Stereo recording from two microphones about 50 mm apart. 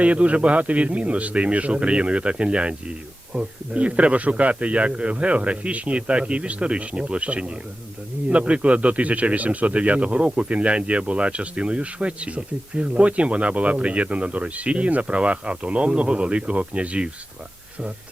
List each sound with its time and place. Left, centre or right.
0.0 s a man's voice: right